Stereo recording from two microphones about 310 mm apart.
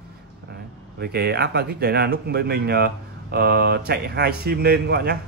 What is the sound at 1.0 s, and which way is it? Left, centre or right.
Speech, right.